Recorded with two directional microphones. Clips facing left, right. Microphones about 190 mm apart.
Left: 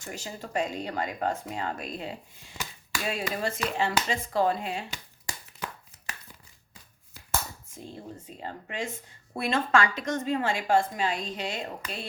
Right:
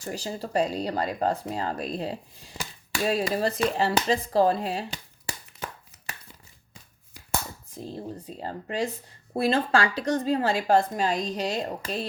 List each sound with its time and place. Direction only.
0.0 s speech: 35° right (ahead or behind)
7.7 s speech: 35° right (ahead or behind)